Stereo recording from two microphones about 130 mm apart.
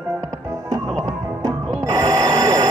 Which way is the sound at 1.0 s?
25° right (ahead or behind).